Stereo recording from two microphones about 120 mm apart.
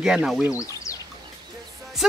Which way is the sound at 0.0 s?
5° right (ahead or behind).